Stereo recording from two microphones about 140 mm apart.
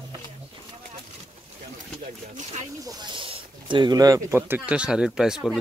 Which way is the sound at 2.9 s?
35° right (ahead or behind).